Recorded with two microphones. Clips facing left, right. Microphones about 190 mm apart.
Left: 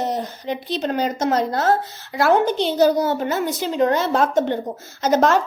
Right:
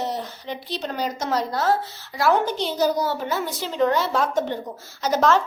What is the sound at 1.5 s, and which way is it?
Speech, 50° left (ahead or behind).